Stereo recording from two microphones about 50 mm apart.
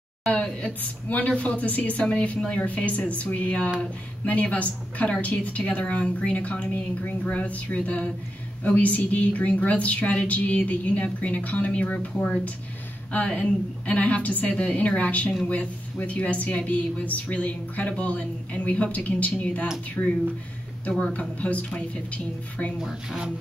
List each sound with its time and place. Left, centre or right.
0.3 s a woman's voice: left
22.8 s speech: centre